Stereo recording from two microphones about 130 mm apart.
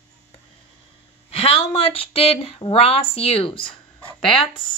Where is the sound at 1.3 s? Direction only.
50° left (ahead or behind).